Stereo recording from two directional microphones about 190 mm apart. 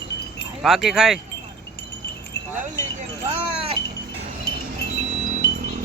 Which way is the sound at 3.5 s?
30° right (ahead or behind).